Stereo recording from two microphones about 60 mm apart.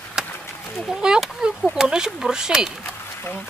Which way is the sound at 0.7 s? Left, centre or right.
Centre.